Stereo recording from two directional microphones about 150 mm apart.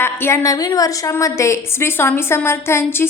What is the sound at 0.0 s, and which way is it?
A woman's voice, 15° left (ahead or behind).